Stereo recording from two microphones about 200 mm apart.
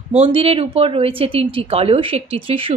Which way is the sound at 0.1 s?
30° right (ahead or behind).